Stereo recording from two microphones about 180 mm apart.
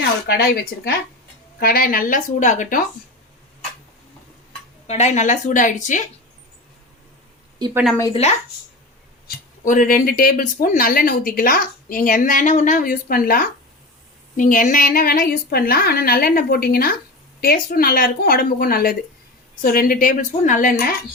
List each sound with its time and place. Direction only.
0.3 s a woman's voice: 60° left (ahead or behind)
4.9 s speech: 35° left (ahead or behind)
7.6 s speech: 15° right (ahead or behind)
8.1 s speech: 35° left (ahead or behind)
9.2 s a woman's voice: 50° left (ahead or behind)